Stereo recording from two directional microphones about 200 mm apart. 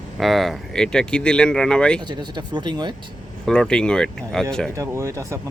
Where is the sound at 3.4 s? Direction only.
5° left (ahead or behind).